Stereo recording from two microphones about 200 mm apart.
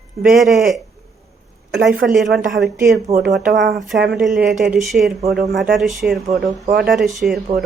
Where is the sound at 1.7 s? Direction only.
50° right (ahead or behind).